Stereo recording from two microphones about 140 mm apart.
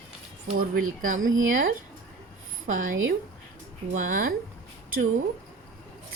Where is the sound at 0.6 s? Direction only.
70° right (ahead or behind); by 4.2 s 90° right.